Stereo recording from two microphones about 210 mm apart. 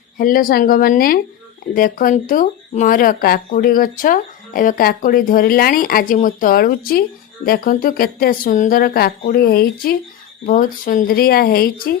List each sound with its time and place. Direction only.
0.2 s speech: 40° left (ahead or behind)